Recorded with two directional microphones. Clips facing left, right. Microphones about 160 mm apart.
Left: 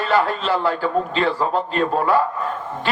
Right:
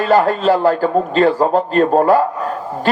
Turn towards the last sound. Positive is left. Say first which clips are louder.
# right 6 dB
turn(degrees=-45)  # may be behind; listen again after turning